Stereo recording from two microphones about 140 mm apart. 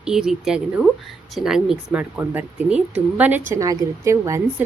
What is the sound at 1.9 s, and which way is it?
A woman's voice, 15° right (ahead or behind).